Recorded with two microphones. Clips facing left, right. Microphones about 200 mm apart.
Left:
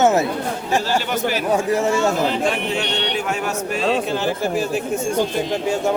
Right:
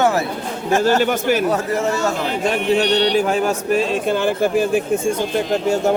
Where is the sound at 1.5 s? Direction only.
15° left (ahead or behind).